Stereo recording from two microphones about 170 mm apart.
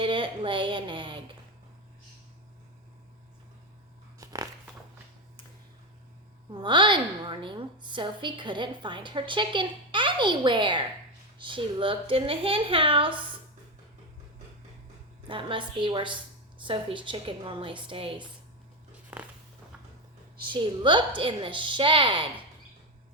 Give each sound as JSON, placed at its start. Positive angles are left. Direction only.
{"t": 0.0, "sound": "a woman's voice", "side_deg": -30}
{"t": 4.2, "sound": "a sound", "side_deg": -20}
{"t": 6.5, "sound": "a woman's voice", "side_deg": -30}
{"t": 15.3, "sound": "a woman's voice", "side_deg": -30}
{"t": 19.1, "sound": "a sound", "side_deg": -10}
{"t": 20.5, "sound": "a woman's voice", "side_deg": -30}